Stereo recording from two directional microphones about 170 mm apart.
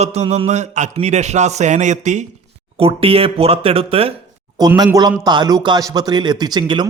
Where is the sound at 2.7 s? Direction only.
35° right (ahead or behind).